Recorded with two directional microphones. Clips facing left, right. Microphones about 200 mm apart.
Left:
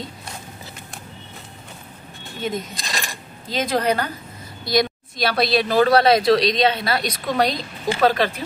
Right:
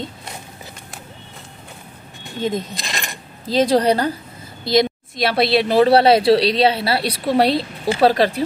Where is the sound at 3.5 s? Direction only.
35° right (ahead or behind).